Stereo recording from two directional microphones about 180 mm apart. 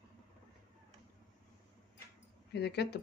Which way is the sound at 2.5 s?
65° left (ahead or behind).